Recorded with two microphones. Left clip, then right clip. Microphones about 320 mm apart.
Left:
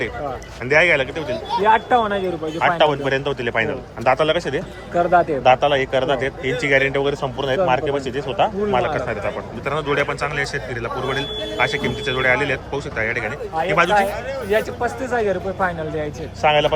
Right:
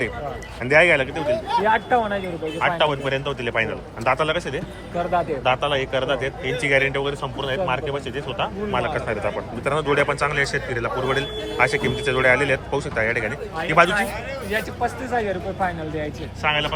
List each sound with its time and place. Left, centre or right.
0.7 s a man's voice: centre
1.6 s speech: left
2.6 s a man's voice: centre
4.9 s speech: left
5.4 s a man's voice: centre
14.5 s a man's voice: left
16.4 s a man's voice: centre